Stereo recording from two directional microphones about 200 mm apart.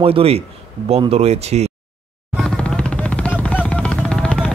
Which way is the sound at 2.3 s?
5° left (ahead or behind).